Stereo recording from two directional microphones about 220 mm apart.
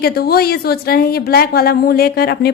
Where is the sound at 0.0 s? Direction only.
45° left (ahead or behind).